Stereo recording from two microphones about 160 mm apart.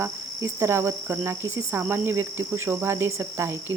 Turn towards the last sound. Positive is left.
turn(degrees=-15)  # may be behind; listen again after turning